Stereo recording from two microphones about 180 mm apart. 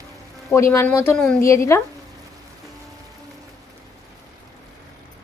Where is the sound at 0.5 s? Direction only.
15° left (ahead or behind).